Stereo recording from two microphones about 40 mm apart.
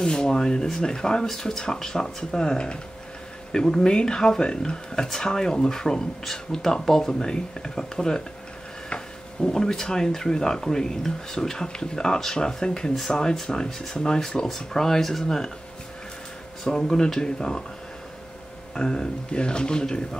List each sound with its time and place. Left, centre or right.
0.0 s speech: centre
16.6 s speech: centre
18.8 s speech: centre